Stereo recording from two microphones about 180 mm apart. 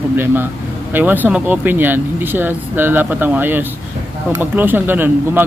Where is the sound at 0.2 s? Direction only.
10° right (ahead or behind).